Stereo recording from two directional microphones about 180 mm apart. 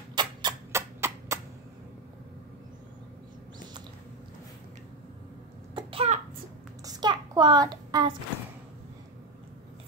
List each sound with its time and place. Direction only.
0.1 s a sound: 25° right (ahead or behind)
5.8 s cough: 30° right (ahead or behind)
6.8 s child singing: 20° right (ahead or behind)